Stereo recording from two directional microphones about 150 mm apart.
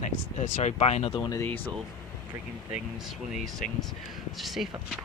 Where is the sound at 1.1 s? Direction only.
25° left (ahead or behind).